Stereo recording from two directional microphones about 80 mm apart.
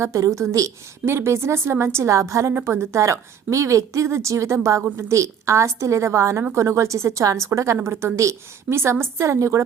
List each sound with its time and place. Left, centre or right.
0.0 s a woman's voice: right